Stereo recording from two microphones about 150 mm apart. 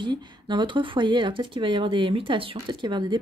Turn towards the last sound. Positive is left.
turn(degrees=-30)  # may be behind; listen again after turning